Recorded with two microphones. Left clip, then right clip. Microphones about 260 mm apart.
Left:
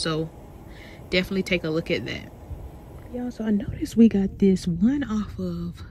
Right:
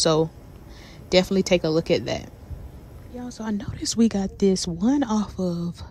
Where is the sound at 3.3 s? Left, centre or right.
Centre.